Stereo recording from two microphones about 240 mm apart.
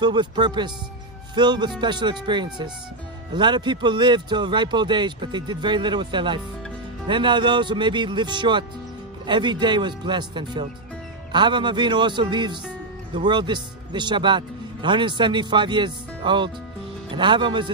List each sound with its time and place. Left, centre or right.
0.0 s a man's voice: centre